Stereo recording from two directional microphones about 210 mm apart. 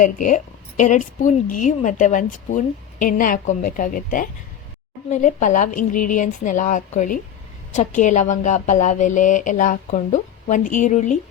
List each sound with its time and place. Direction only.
0.0 s a woman's voice: 40° left (ahead or behind)